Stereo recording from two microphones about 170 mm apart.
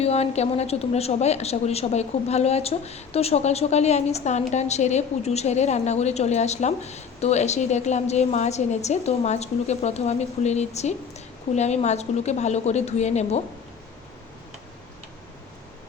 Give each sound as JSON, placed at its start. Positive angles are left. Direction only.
{"t": 0.0, "sound": "a woman's voice", "side_deg": 40}